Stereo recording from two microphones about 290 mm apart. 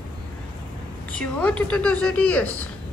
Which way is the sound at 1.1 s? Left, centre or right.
Centre.